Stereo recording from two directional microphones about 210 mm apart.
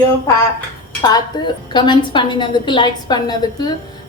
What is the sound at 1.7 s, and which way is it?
A woman's voice, 20° left (ahead or behind).